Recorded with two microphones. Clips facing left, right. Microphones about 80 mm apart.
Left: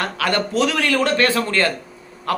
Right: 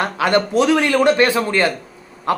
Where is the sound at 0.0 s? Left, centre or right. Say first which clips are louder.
Right 4 dB; right.